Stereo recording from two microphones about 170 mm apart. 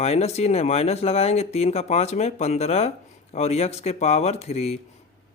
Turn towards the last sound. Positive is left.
turn(degrees=40)  # may be behind; listen again after turning